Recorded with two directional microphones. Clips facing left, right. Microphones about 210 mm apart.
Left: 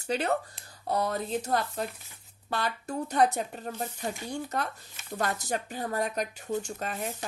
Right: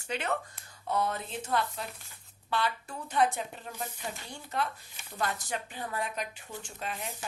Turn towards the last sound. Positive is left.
turn(degrees=45)  # may be behind; listen again after turning